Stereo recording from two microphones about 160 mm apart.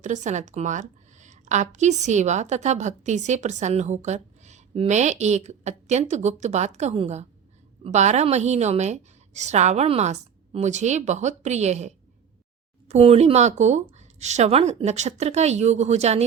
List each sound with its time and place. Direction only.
0.0 s a woman's voice: 50° right (ahead or behind)